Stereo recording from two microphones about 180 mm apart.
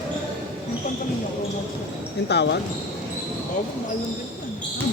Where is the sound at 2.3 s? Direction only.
70° left (ahead or behind).